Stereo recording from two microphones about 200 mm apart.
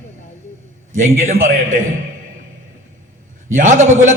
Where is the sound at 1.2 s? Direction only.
35° right (ahead or behind).